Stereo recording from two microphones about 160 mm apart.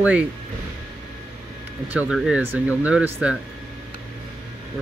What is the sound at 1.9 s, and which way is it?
Speech, 10° right (ahead or behind).